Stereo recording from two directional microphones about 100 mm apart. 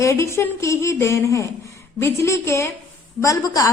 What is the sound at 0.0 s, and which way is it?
A woman's voice, 30° left (ahead or behind).